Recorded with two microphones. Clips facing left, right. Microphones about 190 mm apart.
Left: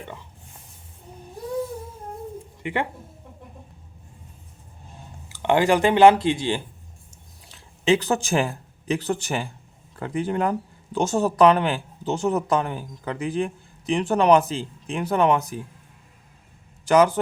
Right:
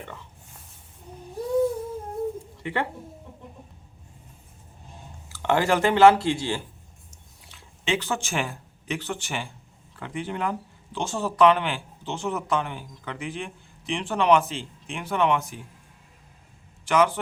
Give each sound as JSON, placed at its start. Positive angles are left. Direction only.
{"t": 2.6, "sound": "speech", "side_deg": 15}
{"t": 5.3, "sound": "speech", "side_deg": 15}
{"t": 7.4, "sound": "speech", "side_deg": 35}
{"t": 16.8, "sound": "a man's voice", "side_deg": 40}